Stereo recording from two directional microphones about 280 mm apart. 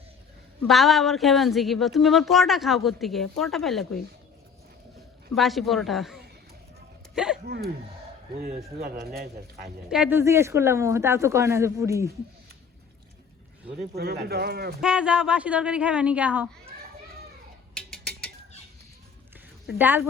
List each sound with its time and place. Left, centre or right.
0.7 s a woman's voice: centre
5.3 s a woman's voice: centre
7.4 s speech: right
9.9 s speech: centre
13.9 s speech: right
14.8 s a woman's voice: centre
17.7 s a sound: centre
19.6 s speech: centre